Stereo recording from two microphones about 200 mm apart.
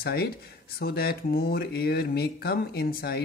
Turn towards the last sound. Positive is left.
turn(degrees=50)  # may be behind; listen again after turning